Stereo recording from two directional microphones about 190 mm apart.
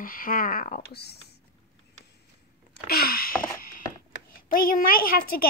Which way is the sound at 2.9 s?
50° left (ahead or behind).